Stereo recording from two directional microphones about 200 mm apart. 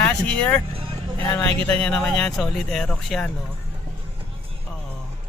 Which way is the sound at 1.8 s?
5° left (ahead or behind).